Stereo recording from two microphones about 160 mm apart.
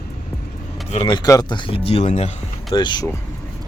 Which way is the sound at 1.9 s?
40° left (ahead or behind).